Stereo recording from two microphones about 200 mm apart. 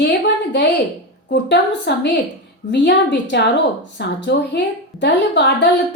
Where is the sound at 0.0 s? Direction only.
60° left (ahead or behind).